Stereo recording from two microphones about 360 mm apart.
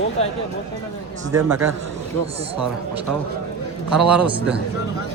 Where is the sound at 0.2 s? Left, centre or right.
Centre.